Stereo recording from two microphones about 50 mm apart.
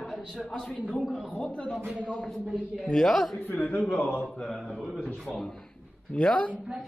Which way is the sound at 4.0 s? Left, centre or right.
Left.